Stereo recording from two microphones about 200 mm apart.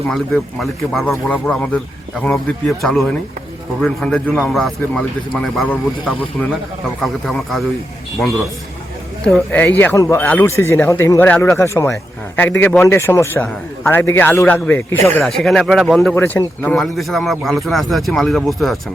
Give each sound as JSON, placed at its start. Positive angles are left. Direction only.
{"t": 0.1, "sound": "a man's voice", "side_deg": 0}
{"t": 9.2, "sound": "a man's voice", "side_deg": 5}